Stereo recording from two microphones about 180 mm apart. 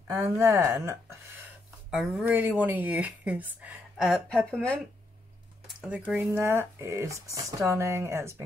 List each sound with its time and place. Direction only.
0.1 s speech: 15° right (ahead or behind)
1.9 s speech: 5° right (ahead or behind)
5.8 s speech: 5° right (ahead or behind)